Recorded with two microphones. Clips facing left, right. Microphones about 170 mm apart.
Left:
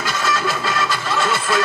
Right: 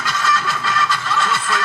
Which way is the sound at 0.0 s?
10° left (ahead or behind).